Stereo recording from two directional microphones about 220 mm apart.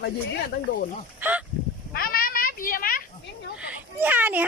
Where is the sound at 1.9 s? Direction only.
40° left (ahead or behind).